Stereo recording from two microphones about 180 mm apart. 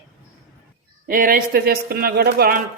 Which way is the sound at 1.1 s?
50° right (ahead or behind).